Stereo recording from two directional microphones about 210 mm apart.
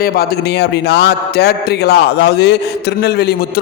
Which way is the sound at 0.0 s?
50° left (ahead or behind).